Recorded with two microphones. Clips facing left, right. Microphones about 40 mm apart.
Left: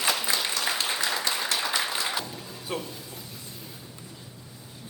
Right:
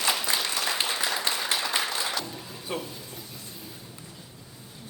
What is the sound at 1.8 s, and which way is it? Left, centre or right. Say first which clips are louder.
Music: even; centre.